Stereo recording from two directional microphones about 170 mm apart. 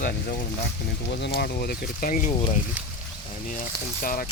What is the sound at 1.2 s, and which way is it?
Speech, 65° left (ahead or behind).